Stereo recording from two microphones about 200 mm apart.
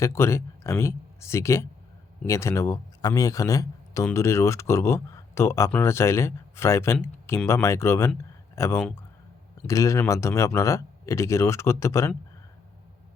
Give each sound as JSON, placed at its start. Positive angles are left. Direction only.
{"t": 0.0, "sound": "speech", "side_deg": 15}